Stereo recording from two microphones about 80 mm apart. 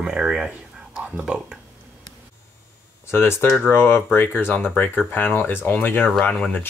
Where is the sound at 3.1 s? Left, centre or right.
Left.